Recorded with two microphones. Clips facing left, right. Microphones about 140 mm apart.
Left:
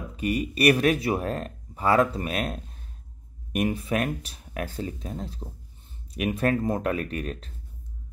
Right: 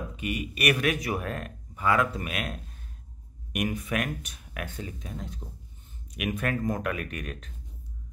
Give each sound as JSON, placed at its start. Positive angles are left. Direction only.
{"t": 0.1, "sound": "speech", "side_deg": 35}